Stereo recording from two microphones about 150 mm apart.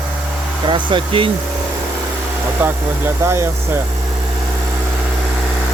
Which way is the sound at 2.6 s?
15° right (ahead or behind).